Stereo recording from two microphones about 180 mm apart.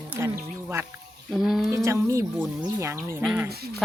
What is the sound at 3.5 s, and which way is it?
Speech, 60° right (ahead or behind).